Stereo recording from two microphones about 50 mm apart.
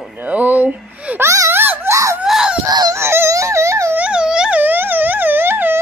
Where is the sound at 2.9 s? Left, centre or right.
Right.